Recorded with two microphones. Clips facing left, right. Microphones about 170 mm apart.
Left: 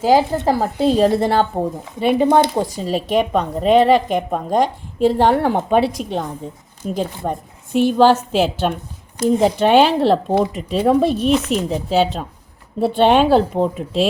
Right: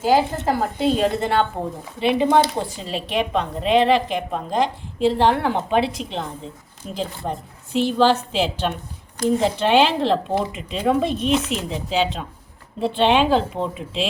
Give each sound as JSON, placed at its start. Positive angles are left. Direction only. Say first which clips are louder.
{"t": 0.0, "sound": "a woman's voice", "louder": "left 4 dB", "side_deg": 40}